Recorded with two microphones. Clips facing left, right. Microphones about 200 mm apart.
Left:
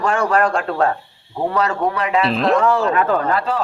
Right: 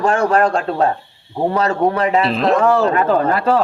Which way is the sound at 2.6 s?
35° right (ahead or behind).